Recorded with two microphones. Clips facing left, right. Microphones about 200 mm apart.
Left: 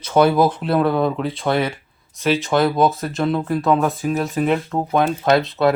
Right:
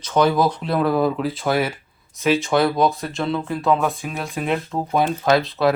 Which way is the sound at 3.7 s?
40° left (ahead or behind).